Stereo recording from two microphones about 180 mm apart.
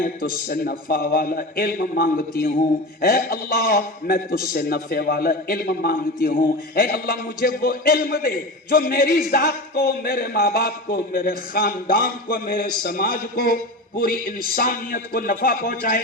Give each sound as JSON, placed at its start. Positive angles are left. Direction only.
{"t": 0.0, "sound": "speech", "side_deg": 50}